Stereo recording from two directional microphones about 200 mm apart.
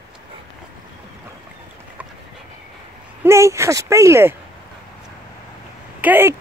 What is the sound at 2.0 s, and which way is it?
Train, 5° right (ahead or behind).